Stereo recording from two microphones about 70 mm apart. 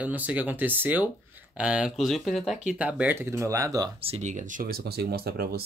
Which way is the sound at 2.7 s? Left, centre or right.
Centre.